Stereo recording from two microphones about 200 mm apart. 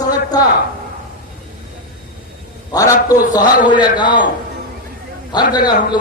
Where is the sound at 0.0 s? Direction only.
20° left (ahead or behind).